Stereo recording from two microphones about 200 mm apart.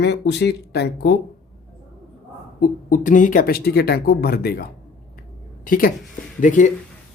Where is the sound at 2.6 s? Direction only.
40° left (ahead or behind).